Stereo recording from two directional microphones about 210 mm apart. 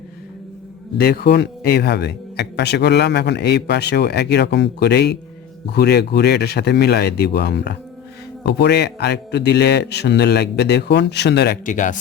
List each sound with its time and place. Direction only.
0.9 s a man's voice: 45° left (ahead or behind)